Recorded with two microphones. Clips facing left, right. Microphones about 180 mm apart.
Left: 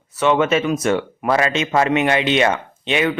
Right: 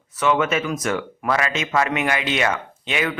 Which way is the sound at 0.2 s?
25° left (ahead or behind).